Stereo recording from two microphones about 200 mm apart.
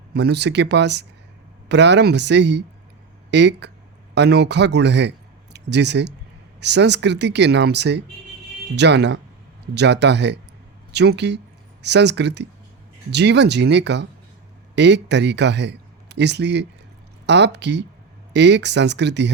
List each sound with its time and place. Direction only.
0.1 s speech: 55° right (ahead or behind)